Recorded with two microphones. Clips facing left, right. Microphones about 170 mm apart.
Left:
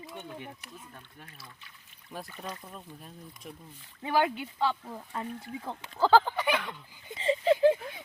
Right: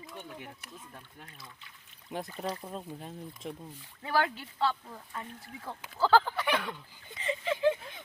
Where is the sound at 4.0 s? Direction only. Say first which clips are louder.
Left 3 dB; 15° left (ahead or behind).